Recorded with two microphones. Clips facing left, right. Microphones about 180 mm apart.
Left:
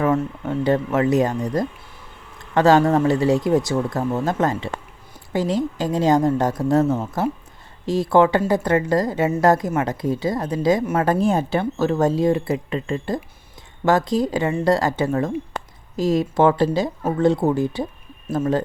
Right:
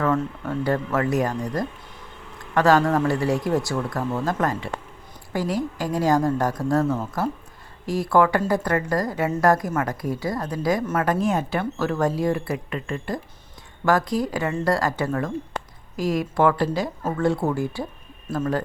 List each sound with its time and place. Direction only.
0.0 s speech: 20° left (ahead or behind)